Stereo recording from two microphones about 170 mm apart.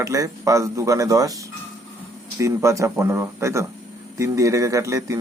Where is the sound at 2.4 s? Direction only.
15° right (ahead or behind).